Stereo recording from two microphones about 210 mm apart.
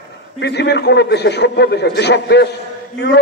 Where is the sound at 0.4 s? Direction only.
50° left (ahead or behind).